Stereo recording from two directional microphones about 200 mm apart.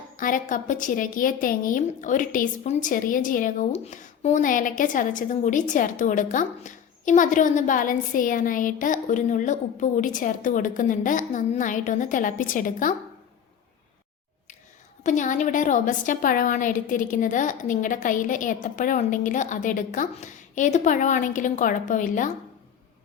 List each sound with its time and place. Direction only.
0.2 s a woman's voice: 40° left (ahead or behind)
15.0 s a woman's voice: 40° left (ahead or behind)